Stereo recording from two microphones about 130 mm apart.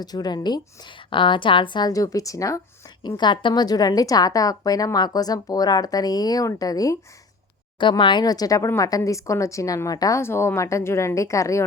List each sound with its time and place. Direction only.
0.0 s a woman's voice: 30° left (ahead or behind)
7.8 s a woman's voice: 40° left (ahead or behind)